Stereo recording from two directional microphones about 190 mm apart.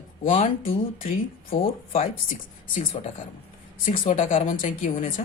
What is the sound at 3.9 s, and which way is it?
Speech, 40° left (ahead or behind).